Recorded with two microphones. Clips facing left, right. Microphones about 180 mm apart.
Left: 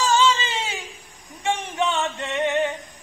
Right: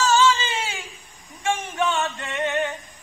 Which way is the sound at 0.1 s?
20° left (ahead or behind).